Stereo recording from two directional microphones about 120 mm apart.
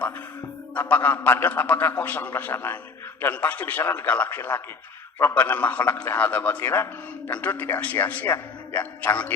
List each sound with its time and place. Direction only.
0.7 s a man's voice: 15° left (ahead or behind)